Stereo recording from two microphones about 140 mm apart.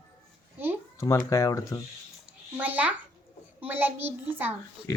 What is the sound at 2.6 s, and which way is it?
A child's voice, 10° right (ahead or behind).